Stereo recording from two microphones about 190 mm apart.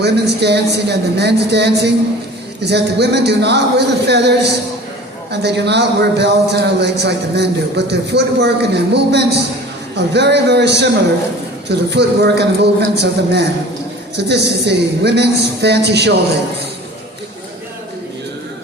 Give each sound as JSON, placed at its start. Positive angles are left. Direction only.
{"t": 0.0, "sound": "a man's voice", "side_deg": -60}